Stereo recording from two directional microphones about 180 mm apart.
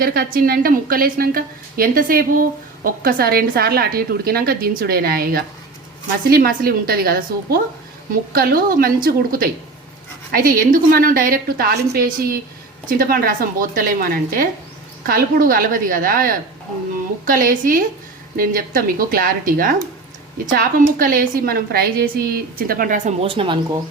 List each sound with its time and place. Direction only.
0.0 s a woman's voice: 55° right (ahead or behind)
23.2 s speech: 30° right (ahead or behind)